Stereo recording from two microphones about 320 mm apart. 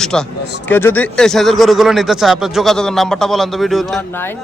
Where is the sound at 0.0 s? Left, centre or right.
Centre.